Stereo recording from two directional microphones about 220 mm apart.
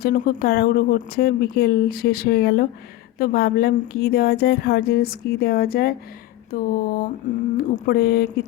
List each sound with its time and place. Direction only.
0.0 s a woman's voice: 40° left (ahead or behind)